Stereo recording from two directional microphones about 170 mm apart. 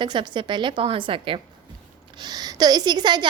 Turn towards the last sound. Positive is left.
turn(degrees=-25)  # may be behind; listen again after turning